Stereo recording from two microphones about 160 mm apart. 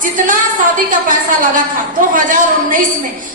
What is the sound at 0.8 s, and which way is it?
A woman's voice, 55° right (ahead or behind).